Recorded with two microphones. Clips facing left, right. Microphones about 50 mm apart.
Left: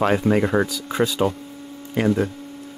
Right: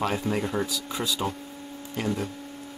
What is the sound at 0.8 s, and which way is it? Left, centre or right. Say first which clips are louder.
Speech: left 8 dB; left.